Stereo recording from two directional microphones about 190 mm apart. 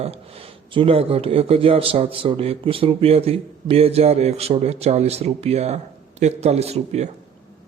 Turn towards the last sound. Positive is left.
turn(degrees=-35)  # may be behind; listen again after turning